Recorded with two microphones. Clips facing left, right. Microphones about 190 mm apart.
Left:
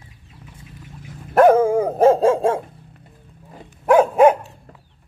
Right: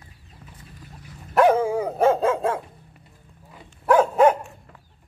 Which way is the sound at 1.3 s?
50° left (ahead or behind).